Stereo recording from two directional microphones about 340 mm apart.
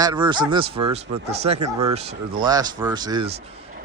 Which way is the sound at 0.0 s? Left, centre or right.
Centre.